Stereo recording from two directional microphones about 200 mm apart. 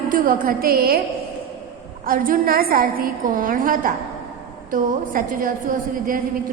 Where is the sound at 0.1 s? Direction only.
45° right (ahead or behind).